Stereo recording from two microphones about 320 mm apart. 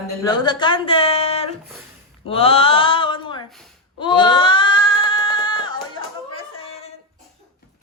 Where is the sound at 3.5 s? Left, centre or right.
Centre.